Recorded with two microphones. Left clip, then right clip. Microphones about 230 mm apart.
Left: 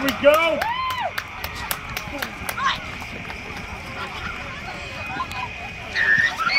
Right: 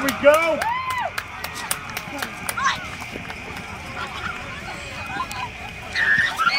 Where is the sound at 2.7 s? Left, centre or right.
Centre.